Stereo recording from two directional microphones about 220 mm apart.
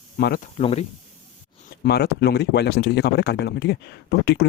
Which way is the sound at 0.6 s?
30° left (ahead or behind).